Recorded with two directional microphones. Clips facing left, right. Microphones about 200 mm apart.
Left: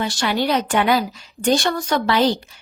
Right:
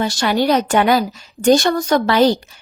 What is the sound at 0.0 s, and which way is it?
A woman's voice, 40° right (ahead or behind).